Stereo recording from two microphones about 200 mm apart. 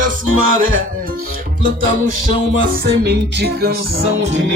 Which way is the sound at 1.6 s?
45° right (ahead or behind).